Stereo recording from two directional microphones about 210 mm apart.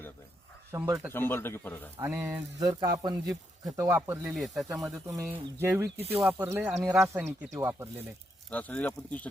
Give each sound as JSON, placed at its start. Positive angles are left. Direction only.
{"t": 0.7, "sound": "speech", "side_deg": -15}
{"t": 1.1, "sound": "speech", "side_deg": 10}
{"t": 2.0, "sound": "speech", "side_deg": -10}
{"t": 4.8, "sound": "speech", "side_deg": -15}
{"t": 6.0, "sound": "speech", "side_deg": -30}
{"t": 6.2, "sound": "speech", "side_deg": -10}
{"t": 8.4, "sound": "speech", "side_deg": 5}